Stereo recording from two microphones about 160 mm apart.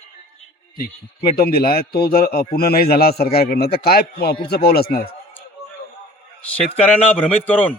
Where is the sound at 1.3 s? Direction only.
70° left (ahead or behind).